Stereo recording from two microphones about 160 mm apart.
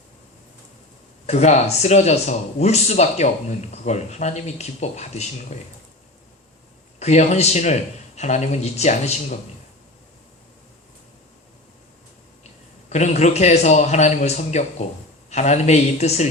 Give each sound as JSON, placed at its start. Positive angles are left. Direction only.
{"t": 1.3, "sound": "speech", "side_deg": 45}
{"t": 7.0, "sound": "speech", "side_deg": 45}
{"t": 12.9, "sound": "speech", "side_deg": 45}